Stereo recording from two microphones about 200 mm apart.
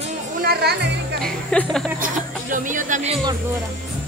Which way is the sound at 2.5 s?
40° right (ahead or behind).